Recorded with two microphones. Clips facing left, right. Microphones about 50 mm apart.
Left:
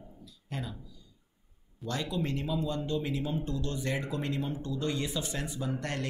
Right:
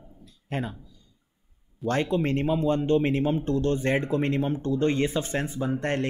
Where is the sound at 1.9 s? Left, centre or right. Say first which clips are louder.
Right 8 dB; right.